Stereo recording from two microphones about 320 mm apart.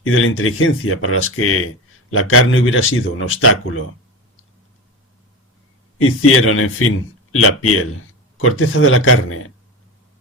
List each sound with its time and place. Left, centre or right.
0.0 s speech: left
6.0 s speech: left